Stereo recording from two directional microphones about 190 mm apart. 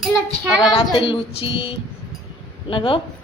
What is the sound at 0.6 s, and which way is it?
Child singing, 25° left (ahead or behind).